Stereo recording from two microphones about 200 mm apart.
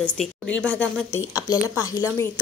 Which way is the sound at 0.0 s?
5° left (ahead or behind).